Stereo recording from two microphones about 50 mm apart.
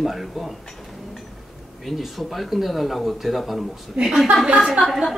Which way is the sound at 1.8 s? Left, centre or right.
Centre.